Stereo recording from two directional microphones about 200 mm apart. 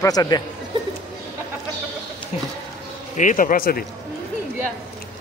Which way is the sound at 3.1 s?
40° left (ahead or behind).